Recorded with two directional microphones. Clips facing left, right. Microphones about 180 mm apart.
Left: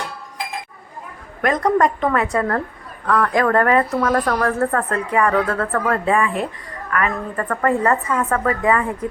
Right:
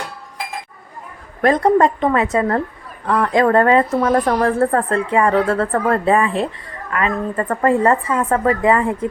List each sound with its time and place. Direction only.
1.4 s speech: 30° right (ahead or behind)